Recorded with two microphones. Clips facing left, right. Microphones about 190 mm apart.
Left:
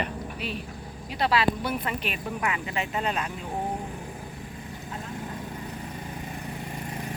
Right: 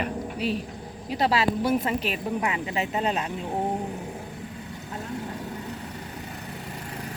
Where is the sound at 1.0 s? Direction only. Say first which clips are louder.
Right 1 dB; 35° right (ahead or behind).